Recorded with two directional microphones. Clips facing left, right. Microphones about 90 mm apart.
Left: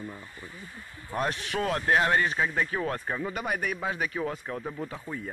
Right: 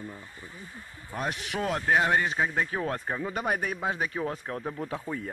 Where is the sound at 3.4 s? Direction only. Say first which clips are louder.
Right 3 dB; 35° right (ahead or behind).